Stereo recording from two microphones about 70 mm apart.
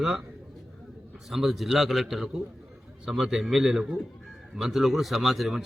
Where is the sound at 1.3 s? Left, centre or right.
Centre.